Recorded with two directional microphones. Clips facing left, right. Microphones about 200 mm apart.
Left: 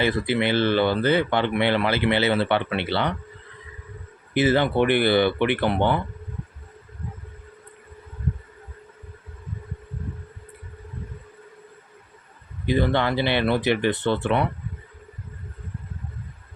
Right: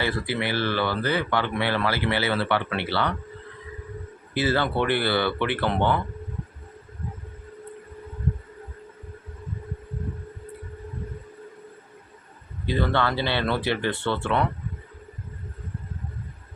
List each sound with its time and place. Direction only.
0.0 s speech: 20° left (ahead or behind)
4.4 s speech: 20° left (ahead or behind)
12.6 s speech: 15° left (ahead or behind)